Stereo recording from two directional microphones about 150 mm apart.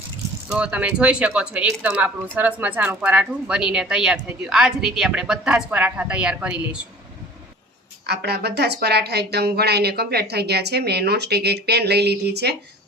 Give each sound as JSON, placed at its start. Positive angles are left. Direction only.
{"t": 0.4, "sound": "speech", "side_deg": -5}
{"t": 8.0, "sound": "a woman's voice", "side_deg": -90}